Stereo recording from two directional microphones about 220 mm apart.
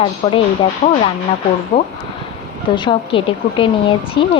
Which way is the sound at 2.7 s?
20° left (ahead or behind).